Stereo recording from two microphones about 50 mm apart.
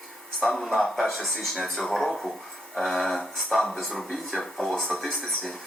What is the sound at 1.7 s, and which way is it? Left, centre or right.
Speech, centre.